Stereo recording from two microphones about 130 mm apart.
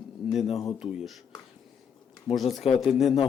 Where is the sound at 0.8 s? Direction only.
5° right (ahead or behind).